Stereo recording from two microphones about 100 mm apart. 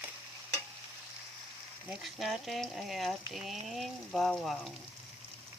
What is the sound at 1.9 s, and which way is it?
Speech, centre (ahead or behind).